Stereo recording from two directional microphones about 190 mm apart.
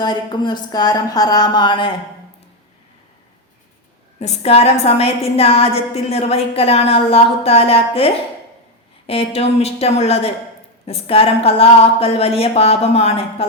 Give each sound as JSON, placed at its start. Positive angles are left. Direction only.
{"t": 0.0, "sound": "speech", "side_deg": 20}
{"t": 4.2, "sound": "a woman's voice", "side_deg": 35}